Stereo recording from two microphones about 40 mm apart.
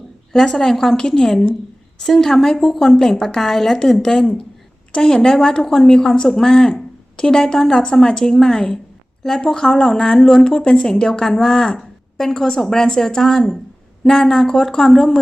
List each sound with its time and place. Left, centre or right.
0.3 s a woman's voice: centre
11.7 s a sound: centre
12.5 s a woman's voice: centre